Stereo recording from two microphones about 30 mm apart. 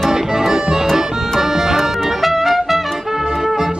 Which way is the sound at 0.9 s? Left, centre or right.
Centre.